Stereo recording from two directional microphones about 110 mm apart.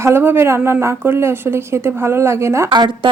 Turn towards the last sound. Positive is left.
turn(degrees=-45)  # may be behind; listen again after turning